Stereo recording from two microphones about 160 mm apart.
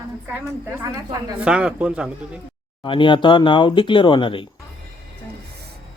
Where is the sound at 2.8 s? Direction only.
30° left (ahead or behind).